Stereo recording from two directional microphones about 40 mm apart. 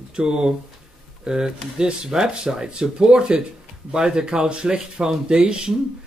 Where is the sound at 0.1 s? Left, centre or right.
Right.